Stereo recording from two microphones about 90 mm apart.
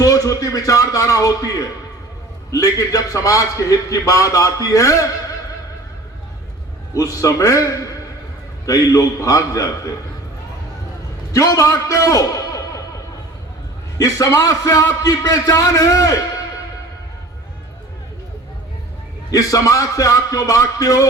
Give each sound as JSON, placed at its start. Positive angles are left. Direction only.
{"t": 0.0, "sound": "a man's voice", "side_deg": 40}
{"t": 6.9, "sound": "a man's voice", "side_deg": 40}
{"t": 8.6, "sound": "a man's voice", "side_deg": 40}
{"t": 11.3, "sound": "a man's voice", "side_deg": 40}
{"t": 14.0, "sound": "a man's voice", "side_deg": 40}
{"t": 19.3, "sound": "a man's voice", "side_deg": 40}